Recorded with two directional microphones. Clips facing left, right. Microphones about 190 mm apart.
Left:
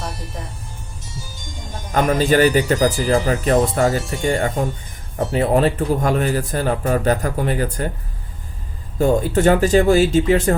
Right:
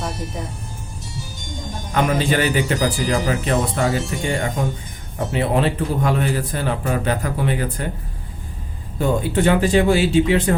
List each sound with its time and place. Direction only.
1.9 s speech: 40° left (ahead or behind)
9.0 s speech: 45° left (ahead or behind)